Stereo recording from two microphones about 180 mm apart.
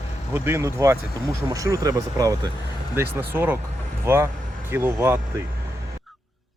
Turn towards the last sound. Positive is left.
turn(degrees=-10)  # may be behind; listen again after turning